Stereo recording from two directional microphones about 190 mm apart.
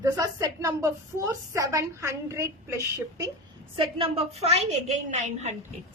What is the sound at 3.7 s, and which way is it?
A woman's voice, 30° right (ahead or behind).